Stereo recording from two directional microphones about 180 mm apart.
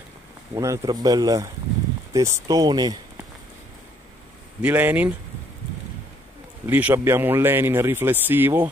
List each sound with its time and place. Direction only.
0.6 s speech: 20° right (ahead or behind)
4.6 s speech: 10° right (ahead or behind)
6.6 s speech: 10° right (ahead or behind)